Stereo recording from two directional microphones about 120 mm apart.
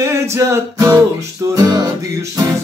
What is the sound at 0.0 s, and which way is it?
Music, 20° right (ahead or behind).